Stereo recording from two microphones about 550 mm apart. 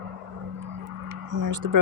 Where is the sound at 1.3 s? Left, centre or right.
Right.